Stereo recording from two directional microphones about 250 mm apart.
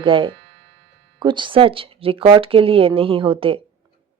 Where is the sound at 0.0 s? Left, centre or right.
Centre.